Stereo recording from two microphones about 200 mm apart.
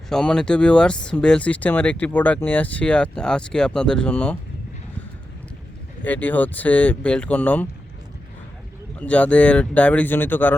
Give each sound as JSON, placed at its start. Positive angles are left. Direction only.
{"t": 0.1, "sound": "speech", "side_deg": 5}
{"t": 6.0, "sound": "speech", "side_deg": 10}
{"t": 9.0, "sound": "speech", "side_deg": 5}